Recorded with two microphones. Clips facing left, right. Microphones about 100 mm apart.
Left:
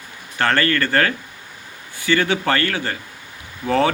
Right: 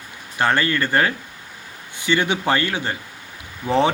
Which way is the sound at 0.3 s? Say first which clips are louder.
Left 1 dB; 15° right (ahead or behind).